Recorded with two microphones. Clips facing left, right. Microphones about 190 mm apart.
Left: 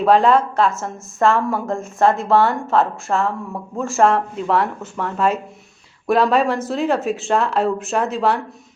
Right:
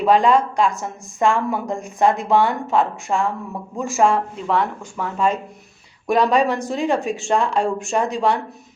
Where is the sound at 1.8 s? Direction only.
15° right (ahead or behind).